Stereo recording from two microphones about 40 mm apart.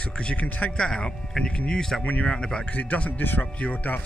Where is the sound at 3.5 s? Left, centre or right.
Left.